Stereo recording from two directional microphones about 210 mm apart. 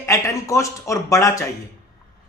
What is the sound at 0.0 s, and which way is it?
A man's voice, 15° left (ahead or behind).